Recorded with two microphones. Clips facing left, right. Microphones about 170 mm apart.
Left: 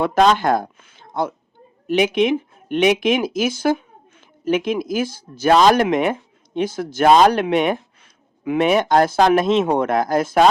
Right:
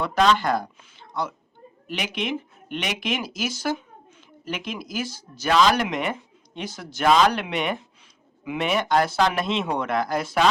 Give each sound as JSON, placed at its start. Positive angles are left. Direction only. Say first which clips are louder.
{"t": 0.0, "sound": "speech", "louder": "left 5 dB", "side_deg": 50}